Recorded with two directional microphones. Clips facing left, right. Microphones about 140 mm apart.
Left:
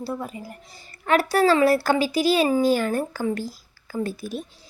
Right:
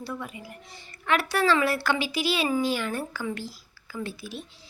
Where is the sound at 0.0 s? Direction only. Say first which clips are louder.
Left 5 dB; 35° left (ahead or behind).